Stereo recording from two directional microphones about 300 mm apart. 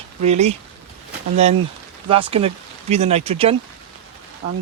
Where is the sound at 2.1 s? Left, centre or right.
Centre.